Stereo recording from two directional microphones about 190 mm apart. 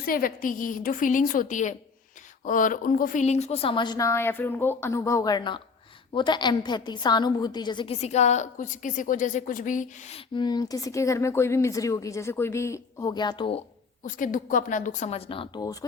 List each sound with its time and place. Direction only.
0.0 s a woman's voice: 50° left (ahead or behind)
10.3 s speech: 20° left (ahead or behind)
14.0 s speech: 45° left (ahead or behind); by 15.8 s 20° left (ahead or behind)